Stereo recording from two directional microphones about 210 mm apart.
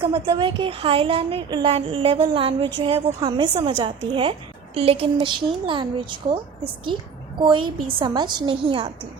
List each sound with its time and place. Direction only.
0.0 s a woman's voice: 25° right (ahead or behind)